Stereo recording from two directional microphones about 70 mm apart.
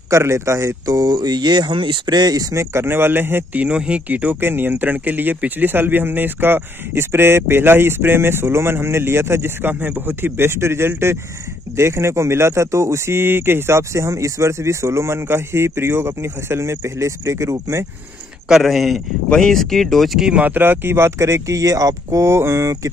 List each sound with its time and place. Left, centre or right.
0.1 s speech: right
0.9 s speech: right
2.5 s speech: right
3.5 s speech: centre; by 17.8 s right
18.5 s speech: centre
20.2 s speech: right